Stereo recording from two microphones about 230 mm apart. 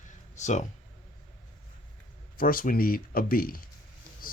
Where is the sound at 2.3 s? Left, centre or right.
Left.